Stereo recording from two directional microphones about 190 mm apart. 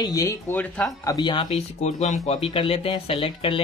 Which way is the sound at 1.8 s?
40° left (ahead or behind).